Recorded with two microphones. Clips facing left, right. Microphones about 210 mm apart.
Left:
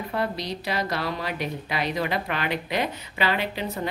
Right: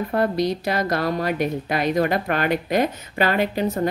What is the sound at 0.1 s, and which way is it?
A woman's voice, 50° right (ahead or behind).